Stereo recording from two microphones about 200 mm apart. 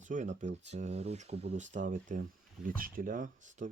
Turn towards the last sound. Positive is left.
turn(degrees=-40)  # may be behind; listen again after turning